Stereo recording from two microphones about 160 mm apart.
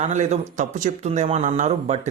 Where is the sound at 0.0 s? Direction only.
45° right (ahead or behind).